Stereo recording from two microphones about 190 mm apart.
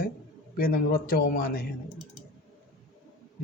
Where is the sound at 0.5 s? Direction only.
50° left (ahead or behind).